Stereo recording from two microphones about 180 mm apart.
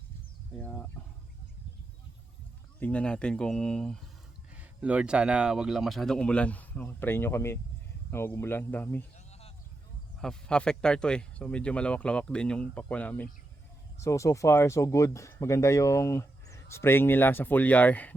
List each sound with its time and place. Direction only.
0.6 s speech: 10° left (ahead or behind)
2.8 s speech: 5° left (ahead or behind)
4.6 s speech: 5° right (ahead or behind); by 9.0 s 10° left (ahead or behind)
10.2 s speech: 5° left (ahead or behind)